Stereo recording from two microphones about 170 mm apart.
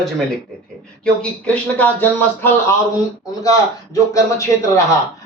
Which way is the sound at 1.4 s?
10° left (ahead or behind).